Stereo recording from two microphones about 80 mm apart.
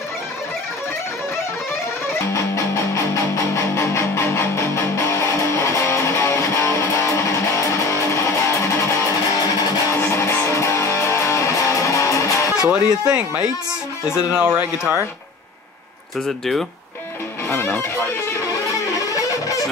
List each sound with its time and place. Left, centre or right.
2.5 s music: left
12.6 s speech: centre
16.3 s speech: centre
17.5 s speech: left
19.0 s music: left